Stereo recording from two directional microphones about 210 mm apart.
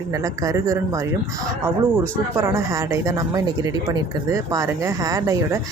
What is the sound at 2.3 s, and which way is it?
Speech, 15° right (ahead or behind).